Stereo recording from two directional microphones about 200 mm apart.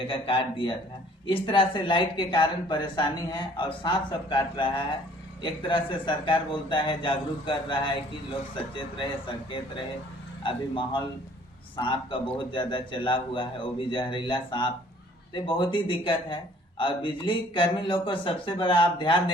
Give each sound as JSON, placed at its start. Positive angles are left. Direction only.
{"t": 0.1, "sound": "a man's voice", "side_deg": 25}